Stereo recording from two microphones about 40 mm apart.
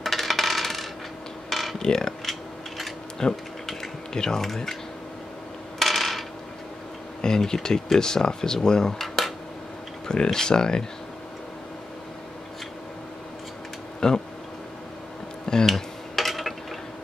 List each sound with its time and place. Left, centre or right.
0.0 s coin: centre
1.5 s a sound: centre
1.8 s dishes: centre
3.2 s speech: centre
5.8 s coin: centre
7.2 s speech: centre
8.6 s cutlery: centre
10.0 s speech: centre
14.0 s speech: centre
15.4 s a sound: centre
15.7 s a sound: centre